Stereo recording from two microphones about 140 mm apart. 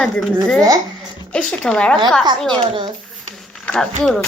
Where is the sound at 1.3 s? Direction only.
5° left (ahead or behind).